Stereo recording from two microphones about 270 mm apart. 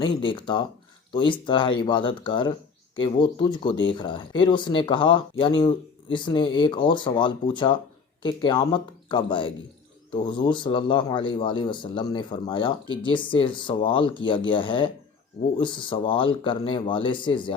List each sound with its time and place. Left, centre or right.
0.0 s speech: centre